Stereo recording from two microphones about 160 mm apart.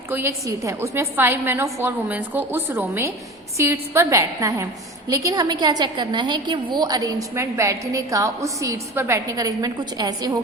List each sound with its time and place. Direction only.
0.1 s a woman's voice: 15° right (ahead or behind)